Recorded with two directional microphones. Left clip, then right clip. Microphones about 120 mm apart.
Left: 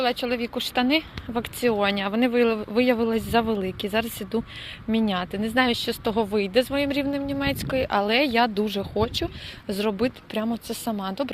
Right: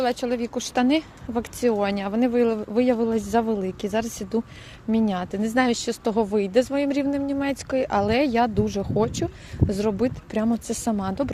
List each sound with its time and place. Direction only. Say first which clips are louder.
0.0 s speech: even; 35° right (ahead or behind)
1.3 s speech: right 1 dB; 25° right (ahead or behind)
10.5 s speech: right 3 dB; 70° right (ahead or behind); by 11.3 s 50° right (ahead or behind)